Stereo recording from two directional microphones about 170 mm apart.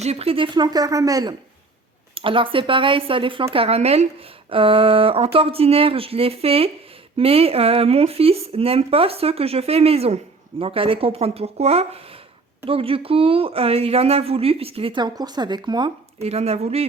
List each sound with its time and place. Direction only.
0.0 s a woman's voice: 35° right (ahead or behind)
16.2 s speech: 40° right (ahead or behind)